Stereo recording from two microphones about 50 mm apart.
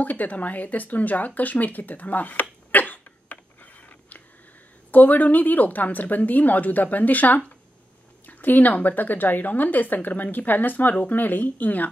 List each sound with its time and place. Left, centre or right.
0.0 s a woman's voice: left
2.7 s a sound: left
4.9 s a woman's voice: left